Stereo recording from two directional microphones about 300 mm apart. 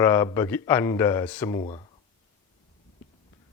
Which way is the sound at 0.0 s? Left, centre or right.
Centre.